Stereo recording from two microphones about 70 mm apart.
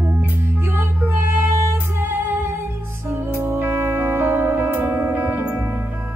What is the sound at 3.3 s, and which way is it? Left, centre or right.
Music, right.